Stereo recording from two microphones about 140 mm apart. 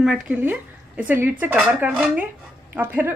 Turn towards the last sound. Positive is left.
turn(degrees=-15)  # may be behind; listen again after turning